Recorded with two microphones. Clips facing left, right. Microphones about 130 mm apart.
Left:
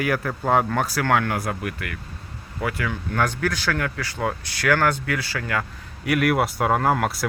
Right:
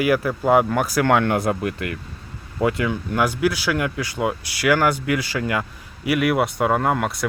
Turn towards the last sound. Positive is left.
turn(degrees=0)  # may be behind; listen again after turning